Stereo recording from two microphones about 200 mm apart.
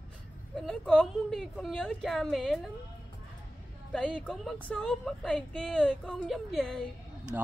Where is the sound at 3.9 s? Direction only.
5° left (ahead or behind).